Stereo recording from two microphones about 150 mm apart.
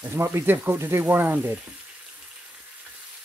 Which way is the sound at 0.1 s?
15° right (ahead or behind).